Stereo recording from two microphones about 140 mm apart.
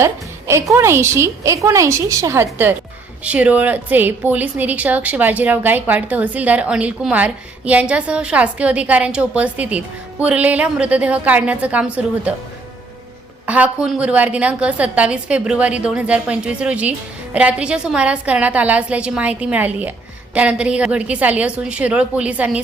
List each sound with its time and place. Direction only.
0.0 s a woman's voice: 20° right (ahead or behind)
13.4 s a woman's voice: 10° right (ahead or behind)